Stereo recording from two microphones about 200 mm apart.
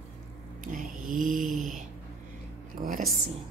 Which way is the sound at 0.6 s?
40° right (ahead or behind).